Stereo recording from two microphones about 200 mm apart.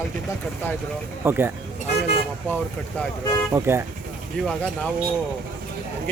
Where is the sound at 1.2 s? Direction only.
10° right (ahead or behind).